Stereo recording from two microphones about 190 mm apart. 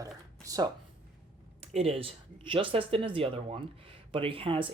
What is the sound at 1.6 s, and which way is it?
Speech, 35° right (ahead or behind).